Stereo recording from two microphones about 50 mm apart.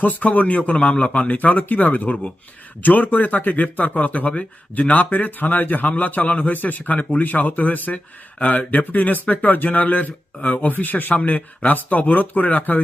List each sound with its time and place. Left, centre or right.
0.0 s speech: left